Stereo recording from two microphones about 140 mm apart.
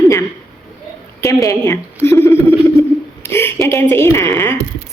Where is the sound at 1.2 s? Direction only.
25° left (ahead or behind).